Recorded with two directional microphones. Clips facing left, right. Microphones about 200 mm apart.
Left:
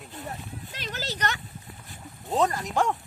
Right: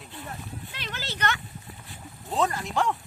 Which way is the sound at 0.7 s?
40° left (ahead or behind).